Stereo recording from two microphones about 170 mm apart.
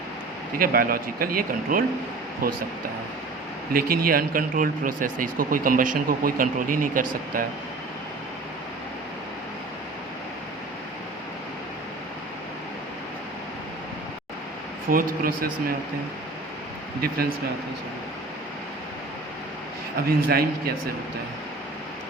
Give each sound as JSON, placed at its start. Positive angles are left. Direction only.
{"t": 0.6, "sound": "speech", "side_deg": -60}
{"t": 3.7, "sound": "speech", "side_deg": -65}
{"t": 14.8, "sound": "speech", "side_deg": -55}
{"t": 17.0, "sound": "speech", "side_deg": -60}
{"t": 20.1, "sound": "speech", "side_deg": -60}